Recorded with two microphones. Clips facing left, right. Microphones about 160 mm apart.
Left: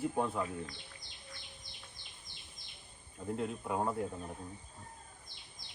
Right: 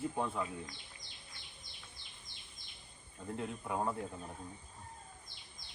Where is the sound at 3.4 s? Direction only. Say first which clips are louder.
Left 2 dB; 5° left (ahead or behind).